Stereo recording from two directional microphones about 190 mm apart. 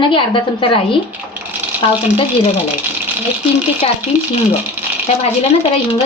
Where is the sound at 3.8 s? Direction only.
35° left (ahead or behind).